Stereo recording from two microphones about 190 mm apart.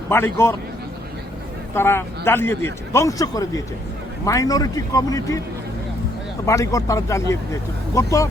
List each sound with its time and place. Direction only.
0.1 s a man's voice: 15° left (ahead or behind)
1.7 s a man's voice: 10° left (ahead or behind)
6.4 s a man's voice: 15° left (ahead or behind)